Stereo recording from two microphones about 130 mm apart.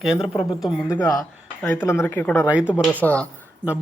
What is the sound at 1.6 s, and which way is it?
Speech, 20° left (ahead or behind).